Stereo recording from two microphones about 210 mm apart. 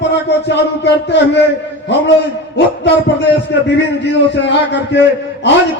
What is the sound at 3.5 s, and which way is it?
A man's voice, 55° left (ahead or behind).